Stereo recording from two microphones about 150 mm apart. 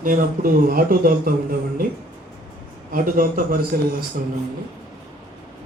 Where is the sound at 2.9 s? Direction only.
70° right (ahead or behind).